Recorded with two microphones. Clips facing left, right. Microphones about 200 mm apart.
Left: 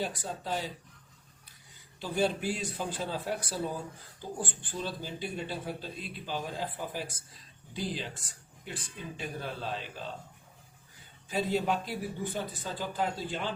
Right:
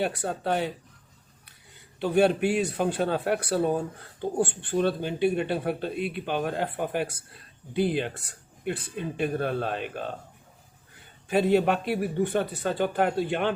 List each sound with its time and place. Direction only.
0.0 s speech: 65° right (ahead or behind)
2.0 s speech: 65° right (ahead or behind)
11.3 s speech: 65° right (ahead or behind)